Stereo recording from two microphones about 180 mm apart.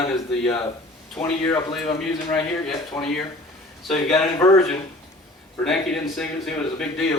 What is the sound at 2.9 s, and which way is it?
Speech, 15° left (ahead or behind).